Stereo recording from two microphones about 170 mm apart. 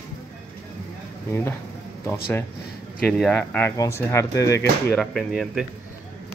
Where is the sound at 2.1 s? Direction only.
10° left (ahead or behind).